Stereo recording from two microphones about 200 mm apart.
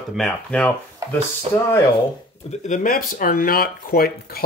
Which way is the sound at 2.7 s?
45° left (ahead or behind).